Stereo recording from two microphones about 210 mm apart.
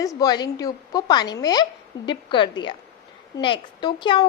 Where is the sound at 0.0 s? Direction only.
15° left (ahead or behind).